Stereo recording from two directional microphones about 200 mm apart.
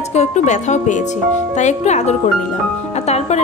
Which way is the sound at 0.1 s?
35° left (ahead or behind).